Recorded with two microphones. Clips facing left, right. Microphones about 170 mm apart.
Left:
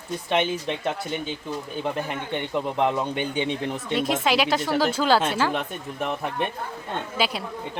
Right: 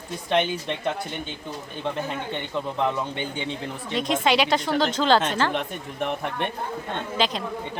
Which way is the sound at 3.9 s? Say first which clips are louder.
Right 1 dB; 5° left (ahead or behind).